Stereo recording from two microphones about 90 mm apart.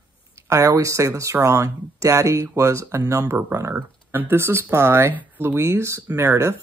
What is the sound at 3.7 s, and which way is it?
Speech, 20° right (ahead or behind).